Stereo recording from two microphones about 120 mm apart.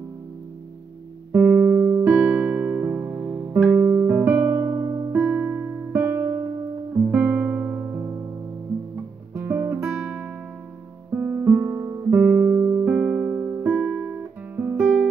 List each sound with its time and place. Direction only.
1.3 s music: 10° right (ahead or behind)
9.3 s music: 15° right (ahead or behind)
11.1 s guitar: 20° right (ahead or behind)